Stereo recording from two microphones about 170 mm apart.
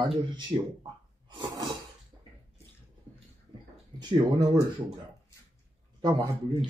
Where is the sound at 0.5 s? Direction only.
15° right (ahead or behind).